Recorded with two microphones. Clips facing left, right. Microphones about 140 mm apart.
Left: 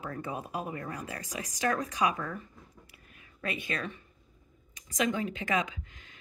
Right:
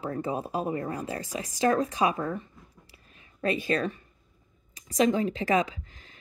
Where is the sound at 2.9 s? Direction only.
30° right (ahead or behind).